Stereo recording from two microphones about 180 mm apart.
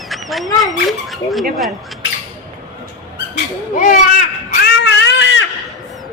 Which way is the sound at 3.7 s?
45° left (ahead or behind).